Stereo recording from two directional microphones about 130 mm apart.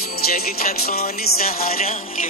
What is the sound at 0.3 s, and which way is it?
Music, 90° left.